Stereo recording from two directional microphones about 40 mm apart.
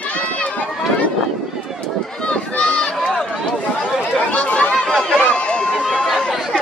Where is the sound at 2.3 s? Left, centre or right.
Left.